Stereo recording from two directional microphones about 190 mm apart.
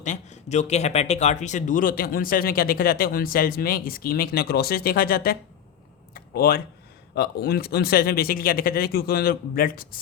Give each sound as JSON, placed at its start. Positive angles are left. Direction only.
{"t": 0.0, "sound": "speech", "side_deg": 40}
{"t": 6.1, "sound": "a sound", "side_deg": 55}
{"t": 7.2, "sound": "speech", "side_deg": 55}